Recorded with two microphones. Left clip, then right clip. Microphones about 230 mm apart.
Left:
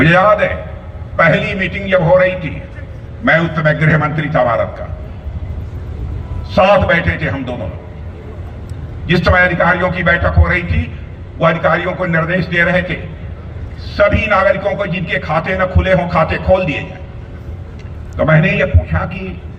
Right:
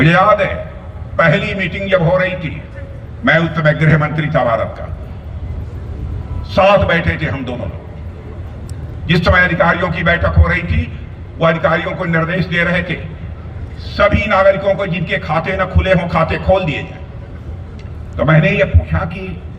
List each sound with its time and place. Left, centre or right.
0.0 s a man's voice: right
6.5 s a man's voice: right
9.0 s a man's voice: right
18.2 s a man's voice: right